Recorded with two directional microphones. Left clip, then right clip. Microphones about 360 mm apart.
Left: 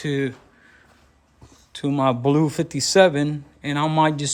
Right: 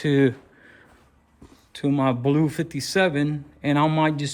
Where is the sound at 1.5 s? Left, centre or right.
Centre.